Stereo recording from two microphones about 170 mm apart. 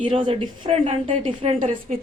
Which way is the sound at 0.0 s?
30° right (ahead or behind).